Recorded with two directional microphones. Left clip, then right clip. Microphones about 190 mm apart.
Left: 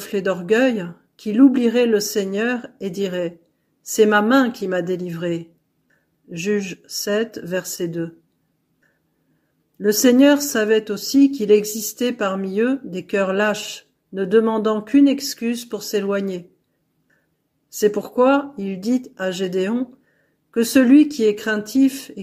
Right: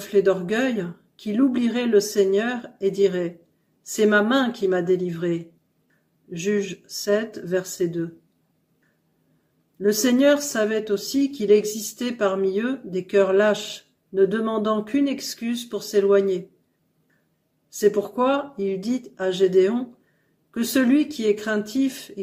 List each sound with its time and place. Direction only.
0.0 s speech: 35° left (ahead or behind)
9.8 s speech: 35° left (ahead or behind)
17.6 s speech: 35° left (ahead or behind)